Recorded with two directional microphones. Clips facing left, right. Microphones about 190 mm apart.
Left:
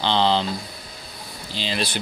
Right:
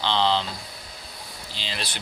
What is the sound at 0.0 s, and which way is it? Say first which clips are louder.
Speech: left 3 dB; 40° left (ahead or behind).